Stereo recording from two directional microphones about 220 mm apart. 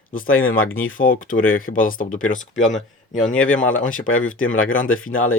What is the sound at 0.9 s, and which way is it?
Speech, 40° left (ahead or behind).